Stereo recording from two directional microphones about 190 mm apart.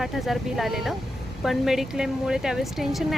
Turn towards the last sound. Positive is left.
turn(degrees=0)  # may be behind; listen again after turning